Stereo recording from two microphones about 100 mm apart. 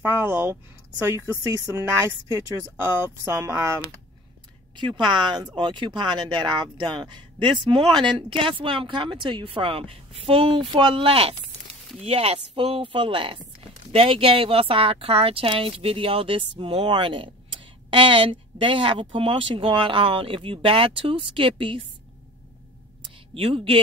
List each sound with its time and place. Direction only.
0.0 s a woman's voice: 20° right (ahead or behind)
4.7 s speech: 50° right (ahead or behind); by 10.6 s 70° right (ahead or behind)
10.7 s speech: 60° right (ahead or behind)
12.0 s speech: 85° right; by 21.8 s 65° right (ahead or behind)
23.3 s speech: 65° right (ahead or behind)